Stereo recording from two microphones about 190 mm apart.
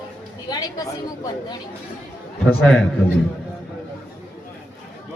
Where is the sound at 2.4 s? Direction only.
5° left (ahead or behind).